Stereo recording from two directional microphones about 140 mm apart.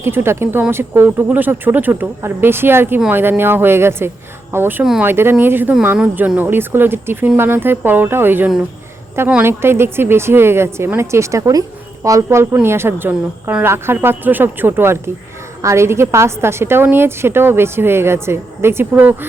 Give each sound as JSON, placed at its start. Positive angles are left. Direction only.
{"t": 0.0, "sound": "a woman's voice", "side_deg": -15}